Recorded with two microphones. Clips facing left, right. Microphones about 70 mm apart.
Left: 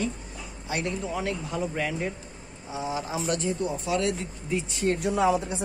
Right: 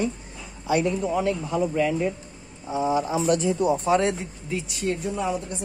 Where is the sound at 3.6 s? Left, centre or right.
Right.